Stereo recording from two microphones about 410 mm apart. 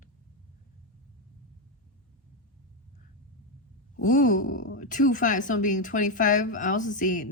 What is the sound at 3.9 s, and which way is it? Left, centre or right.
A woman's voice, centre.